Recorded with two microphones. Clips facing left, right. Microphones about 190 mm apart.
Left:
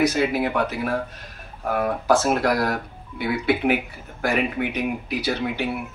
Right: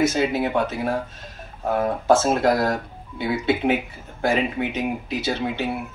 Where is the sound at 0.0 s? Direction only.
25° right (ahead or behind).